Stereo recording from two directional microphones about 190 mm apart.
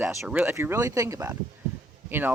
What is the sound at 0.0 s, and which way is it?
Speech, 15° right (ahead or behind).